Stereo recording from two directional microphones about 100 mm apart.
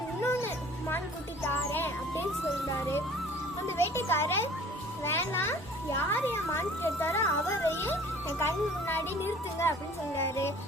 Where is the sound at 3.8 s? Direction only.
25° left (ahead or behind).